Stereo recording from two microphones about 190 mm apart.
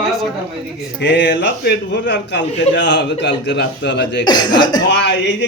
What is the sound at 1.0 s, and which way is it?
A man's voice, 65° left (ahead or behind).